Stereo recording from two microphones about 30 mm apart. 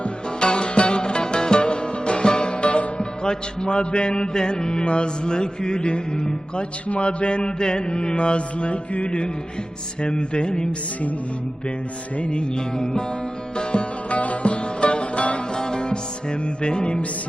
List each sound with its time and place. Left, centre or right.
0.0 s music: left
3.2 s mantra: left
6.8 s mantra: left
12.1 s mantra: left
12.5 s mantra: left
13.6 s music: left
14.2 s music: left
15.5 s music: left